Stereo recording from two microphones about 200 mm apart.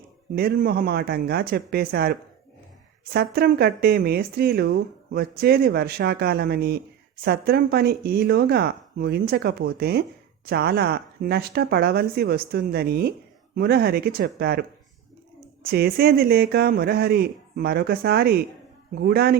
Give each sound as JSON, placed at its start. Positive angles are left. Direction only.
{"t": 0.3, "sound": "speech", "side_deg": -45}
{"t": 15.6, "sound": "speech", "side_deg": -50}